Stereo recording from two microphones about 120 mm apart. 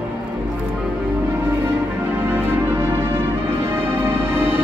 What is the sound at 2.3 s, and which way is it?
Music, 20° right (ahead or behind).